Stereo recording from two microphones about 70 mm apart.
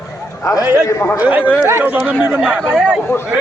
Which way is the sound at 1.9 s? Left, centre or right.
Centre.